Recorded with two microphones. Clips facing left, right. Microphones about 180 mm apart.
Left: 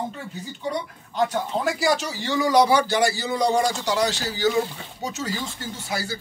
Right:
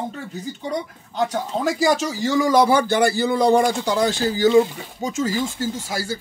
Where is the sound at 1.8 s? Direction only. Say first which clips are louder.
Right 4 dB; 45° right (ahead or behind).